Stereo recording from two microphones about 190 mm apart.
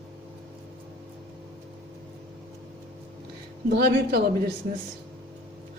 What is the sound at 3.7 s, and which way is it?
Speech, 60° right (ahead or behind).